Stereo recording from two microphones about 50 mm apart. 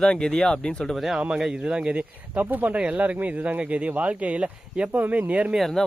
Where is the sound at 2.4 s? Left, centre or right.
Right.